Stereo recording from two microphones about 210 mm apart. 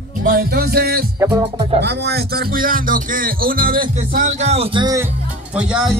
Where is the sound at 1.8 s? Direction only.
50° right (ahead or behind); by 5.1 s 20° right (ahead or behind).